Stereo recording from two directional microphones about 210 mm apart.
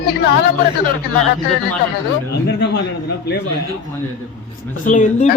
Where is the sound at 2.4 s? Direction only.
50° left (ahead or behind).